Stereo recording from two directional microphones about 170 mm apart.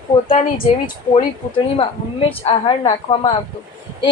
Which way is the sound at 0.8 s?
30° left (ahead or behind).